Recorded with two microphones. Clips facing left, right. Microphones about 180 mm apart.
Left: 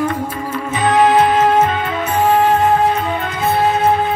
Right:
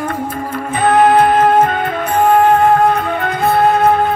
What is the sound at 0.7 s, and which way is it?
Music, 50° right (ahead or behind).